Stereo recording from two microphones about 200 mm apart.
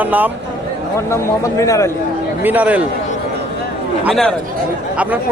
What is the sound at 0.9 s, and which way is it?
Speech, 15° left (ahead or behind).